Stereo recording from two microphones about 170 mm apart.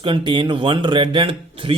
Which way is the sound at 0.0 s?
30° right (ahead or behind).